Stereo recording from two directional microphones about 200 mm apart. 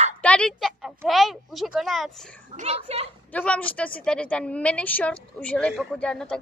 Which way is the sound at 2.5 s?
35° right (ahead or behind).